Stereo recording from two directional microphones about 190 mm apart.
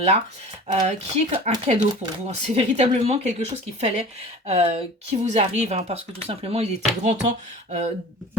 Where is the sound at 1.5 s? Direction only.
35° right (ahead or behind).